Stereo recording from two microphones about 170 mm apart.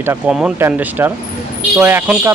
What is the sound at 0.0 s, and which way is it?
Speech, 10° right (ahead or behind).